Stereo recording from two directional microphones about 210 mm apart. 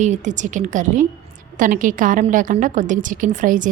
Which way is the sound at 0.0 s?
35° right (ahead or behind).